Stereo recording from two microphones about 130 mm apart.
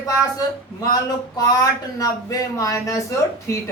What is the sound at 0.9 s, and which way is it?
A man's voice, 30° left (ahead or behind).